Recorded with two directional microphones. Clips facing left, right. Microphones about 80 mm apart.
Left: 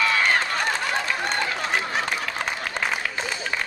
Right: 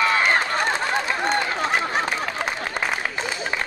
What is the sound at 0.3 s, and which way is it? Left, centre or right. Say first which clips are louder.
Honk: right 2 dB; right.